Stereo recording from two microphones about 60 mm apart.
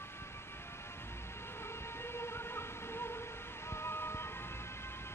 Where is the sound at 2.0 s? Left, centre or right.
Left.